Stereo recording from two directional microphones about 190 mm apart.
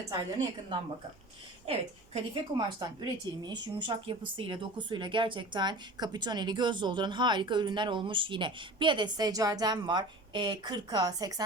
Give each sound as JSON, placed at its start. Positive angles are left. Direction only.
{"t": 1.6, "sound": "speech", "side_deg": -30}